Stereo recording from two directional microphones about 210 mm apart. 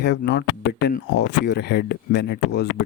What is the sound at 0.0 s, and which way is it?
Speech, 50° left (ahead or behind).